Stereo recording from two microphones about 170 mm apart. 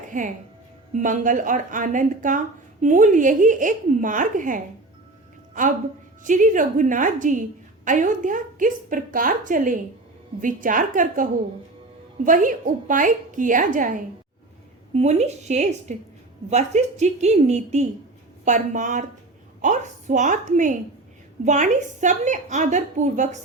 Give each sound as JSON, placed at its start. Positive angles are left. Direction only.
{"t": 0.9, "sound": "a woman's voice", "side_deg": -50}
{"t": 6.2, "sound": "a woman's voice", "side_deg": -50}